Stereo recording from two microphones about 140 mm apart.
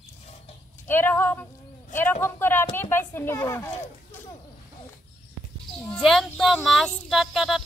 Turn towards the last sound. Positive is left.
turn(degrees=0)  # may be behind; listen again after turning